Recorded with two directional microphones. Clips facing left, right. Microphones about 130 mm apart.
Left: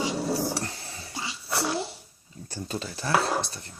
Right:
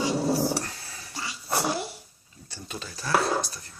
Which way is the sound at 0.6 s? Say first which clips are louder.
Left 3 dB; 30° left (ahead or behind).